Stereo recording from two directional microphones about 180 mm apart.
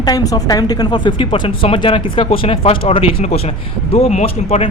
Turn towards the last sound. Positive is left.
turn(degrees=35)  # may be behind; listen again after turning